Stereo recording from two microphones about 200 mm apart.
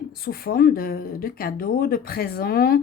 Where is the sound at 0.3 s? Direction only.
50° left (ahead or behind).